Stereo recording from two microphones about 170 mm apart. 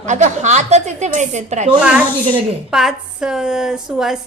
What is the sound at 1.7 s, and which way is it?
A woman's voice, 5° right (ahead or behind).